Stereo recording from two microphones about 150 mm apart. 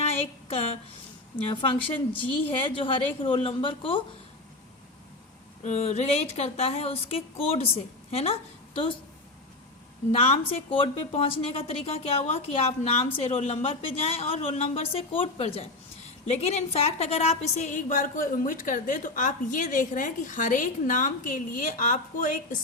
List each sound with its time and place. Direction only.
0.2 s a woman's voice: 40° left (ahead or behind)
5.6 s a woman's voice: 45° left (ahead or behind)
10.1 s a woman's voice: 40° left (ahead or behind); by 22.4 s 60° left (ahead or behind)